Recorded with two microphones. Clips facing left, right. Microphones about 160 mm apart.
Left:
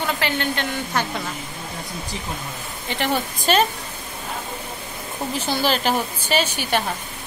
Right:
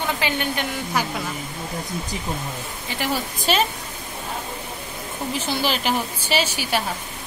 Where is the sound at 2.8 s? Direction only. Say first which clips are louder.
Left 3 dB; 5° right (ahead or behind).